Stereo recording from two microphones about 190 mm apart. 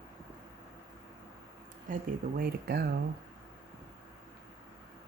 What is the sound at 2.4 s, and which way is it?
Speech, 55° right (ahead or behind).